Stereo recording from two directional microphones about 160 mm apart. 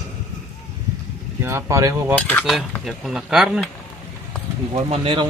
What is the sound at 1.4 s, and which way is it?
Speech, 20° right (ahead or behind).